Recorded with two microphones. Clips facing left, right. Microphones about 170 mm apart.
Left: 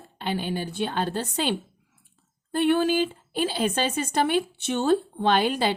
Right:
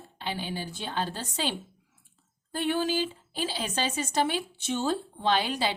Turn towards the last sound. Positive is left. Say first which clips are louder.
# left 5 dB
turn(degrees=50)  # may be behind; listen again after turning